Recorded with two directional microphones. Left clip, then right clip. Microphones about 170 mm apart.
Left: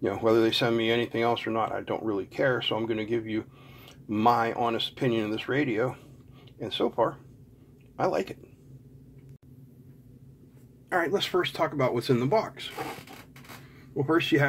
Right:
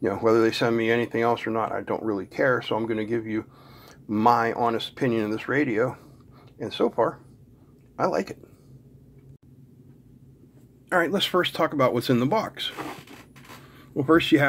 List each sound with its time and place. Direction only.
0.0 s speech: 20° right (ahead or behind)
7.9 s a sound: 20° right (ahead or behind)
10.9 s speech: 40° right (ahead or behind)
13.9 s speech: 40° right (ahead or behind)